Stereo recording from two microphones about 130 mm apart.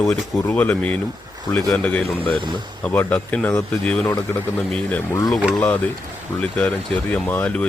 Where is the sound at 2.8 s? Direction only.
15° left (ahead or behind).